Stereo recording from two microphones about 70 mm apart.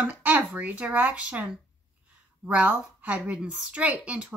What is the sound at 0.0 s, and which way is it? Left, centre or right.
Speech, right.